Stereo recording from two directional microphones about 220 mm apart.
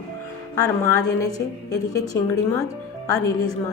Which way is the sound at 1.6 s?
15° left (ahead or behind).